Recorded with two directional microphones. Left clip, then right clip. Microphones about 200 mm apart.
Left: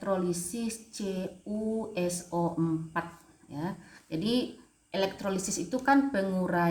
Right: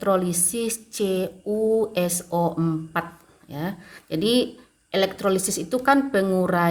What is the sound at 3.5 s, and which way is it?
A woman's voice, 50° right (ahead or behind).